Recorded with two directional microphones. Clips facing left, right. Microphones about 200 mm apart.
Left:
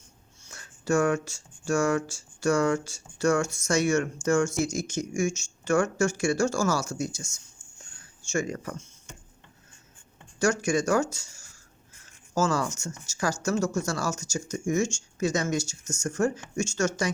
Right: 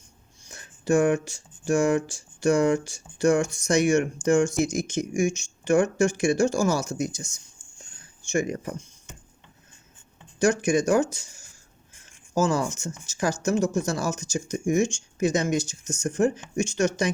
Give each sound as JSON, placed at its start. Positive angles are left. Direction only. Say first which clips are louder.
{"t": 0.4, "sound": "speech", "louder": "right 3 dB", "side_deg": -15}
{"t": 10.4, "sound": "speech", "louder": "right 3 dB", "side_deg": -15}